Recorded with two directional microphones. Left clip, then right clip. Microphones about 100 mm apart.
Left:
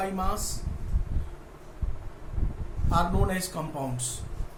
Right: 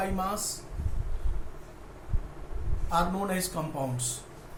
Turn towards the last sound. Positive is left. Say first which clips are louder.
# even
turn(degrees=15)  # may be behind; listen again after turning